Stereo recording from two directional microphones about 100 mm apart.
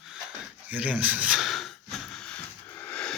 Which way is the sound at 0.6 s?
15° right (ahead or behind).